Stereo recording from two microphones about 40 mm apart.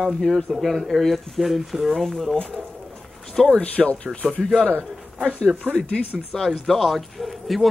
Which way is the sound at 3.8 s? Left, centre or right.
Centre.